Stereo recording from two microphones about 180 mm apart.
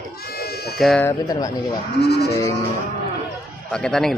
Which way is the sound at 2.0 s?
65° left (ahead or behind).